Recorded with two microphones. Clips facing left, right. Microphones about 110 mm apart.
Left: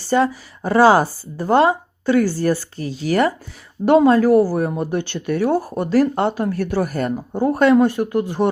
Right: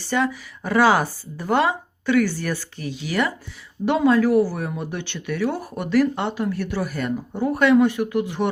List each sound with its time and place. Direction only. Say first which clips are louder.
0.0 s speech: left 5 dB; 35° left (ahead or behind)